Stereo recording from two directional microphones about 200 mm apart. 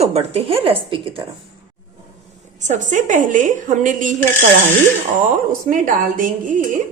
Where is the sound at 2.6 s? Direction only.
40° right (ahead or behind).